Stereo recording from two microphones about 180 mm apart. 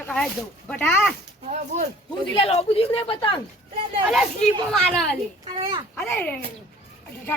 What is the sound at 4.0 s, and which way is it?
Speech, 5° right (ahead or behind).